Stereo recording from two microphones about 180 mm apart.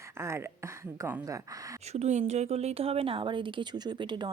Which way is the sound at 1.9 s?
40° right (ahead or behind).